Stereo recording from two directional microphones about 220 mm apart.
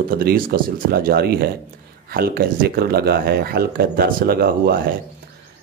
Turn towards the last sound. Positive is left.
turn(degrees=-40)  # may be behind; listen again after turning